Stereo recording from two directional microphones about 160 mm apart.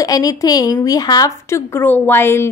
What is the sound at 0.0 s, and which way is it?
A woman's voice, 25° left (ahead or behind).